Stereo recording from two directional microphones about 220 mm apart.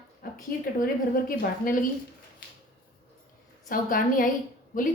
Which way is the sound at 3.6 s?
40° left (ahead or behind).